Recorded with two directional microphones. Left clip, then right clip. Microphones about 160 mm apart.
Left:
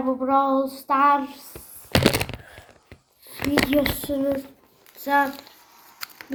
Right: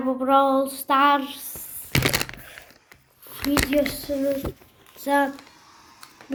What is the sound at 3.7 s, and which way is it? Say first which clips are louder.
Speech: even; 10° left (ahead or behind).